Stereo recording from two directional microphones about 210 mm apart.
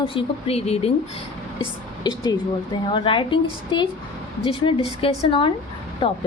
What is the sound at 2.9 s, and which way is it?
Speech, 25° left (ahead or behind).